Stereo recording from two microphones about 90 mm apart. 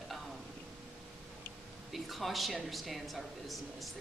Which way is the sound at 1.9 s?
Centre (ahead or behind).